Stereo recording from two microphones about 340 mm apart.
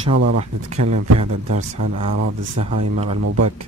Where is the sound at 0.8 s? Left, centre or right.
Right.